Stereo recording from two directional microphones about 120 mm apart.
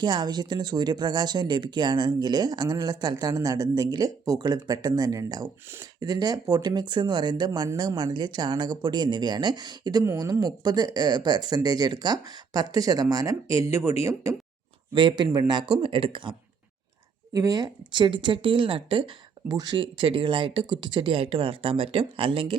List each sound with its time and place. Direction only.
0.0 s speech: 35° right (ahead or behind)
10.0 s speech: 25° right (ahead or behind)
14.9 s speech: 40° right (ahead or behind)
17.3 s speech: 30° right (ahead or behind); by 19.1 s 45° right (ahead or behind)
19.5 s speech: 35° right (ahead or behind); by 22.5 s 50° right (ahead or behind)